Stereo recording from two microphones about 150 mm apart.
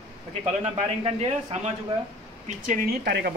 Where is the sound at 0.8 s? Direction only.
45° right (ahead or behind).